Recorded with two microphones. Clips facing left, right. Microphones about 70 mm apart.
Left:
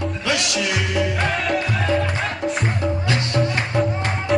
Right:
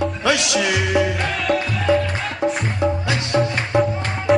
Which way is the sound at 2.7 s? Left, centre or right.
Right.